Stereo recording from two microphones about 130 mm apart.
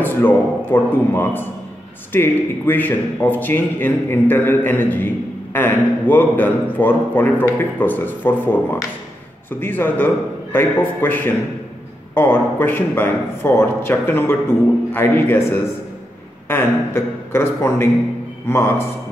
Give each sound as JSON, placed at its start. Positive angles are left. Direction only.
{"t": 0.0, "sound": "a man's voice", "side_deg": 15}